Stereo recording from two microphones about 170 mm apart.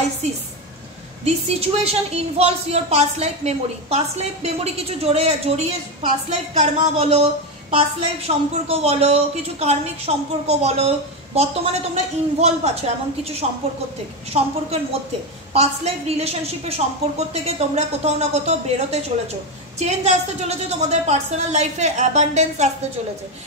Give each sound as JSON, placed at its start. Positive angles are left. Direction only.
{"t": 0.2, "sound": "a woman's voice", "side_deg": -40}
{"t": 15.5, "sound": "a woman's voice", "side_deg": -40}